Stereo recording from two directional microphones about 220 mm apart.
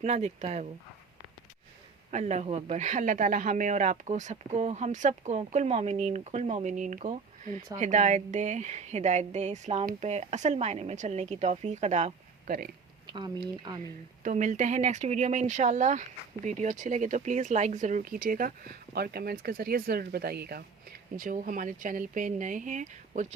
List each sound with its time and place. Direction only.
0.0 s speech: 30° right (ahead or behind)
2.0 s speech: 30° right (ahead or behind)
13.1 s speech: 20° right (ahead or behind)
14.3 s speech: 35° right (ahead or behind)